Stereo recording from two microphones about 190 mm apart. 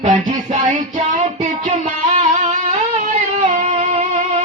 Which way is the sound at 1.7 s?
35° right (ahead or behind).